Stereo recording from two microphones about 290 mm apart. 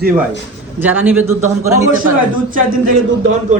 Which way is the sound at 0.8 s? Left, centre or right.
Centre.